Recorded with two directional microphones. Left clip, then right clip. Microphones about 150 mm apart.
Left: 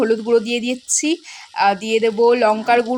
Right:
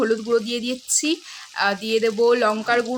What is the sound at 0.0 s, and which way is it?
Speech, 20° left (ahead or behind).